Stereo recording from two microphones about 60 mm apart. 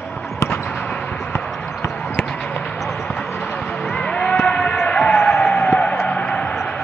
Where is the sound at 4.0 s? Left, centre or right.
Left.